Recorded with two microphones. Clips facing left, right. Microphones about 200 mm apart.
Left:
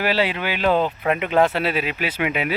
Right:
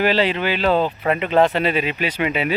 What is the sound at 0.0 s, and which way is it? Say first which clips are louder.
Speech: right 3 dB; 5° left (ahead or behind).